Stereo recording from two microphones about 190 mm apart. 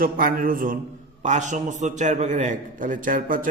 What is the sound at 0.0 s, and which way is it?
A man's voice, 50° right (ahead or behind).